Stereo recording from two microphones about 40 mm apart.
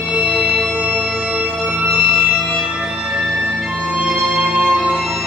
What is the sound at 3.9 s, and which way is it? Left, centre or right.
Music, centre.